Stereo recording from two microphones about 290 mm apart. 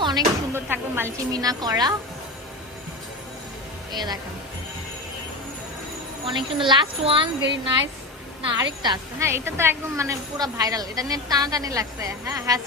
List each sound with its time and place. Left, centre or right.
0.0 s speech: centre
3.9 s a woman's voice: centre
6.2 s a woman's voice: centre